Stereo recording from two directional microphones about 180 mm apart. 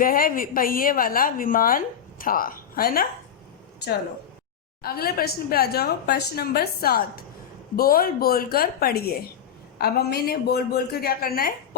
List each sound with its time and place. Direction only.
0.0 s a woman's voice: 50° left (ahead or behind)
4.8 s a woman's voice: 55° left (ahead or behind)